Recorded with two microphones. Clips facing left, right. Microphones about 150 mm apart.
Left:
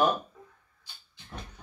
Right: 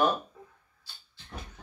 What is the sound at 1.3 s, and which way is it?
Vehicle, 5° left (ahead or behind).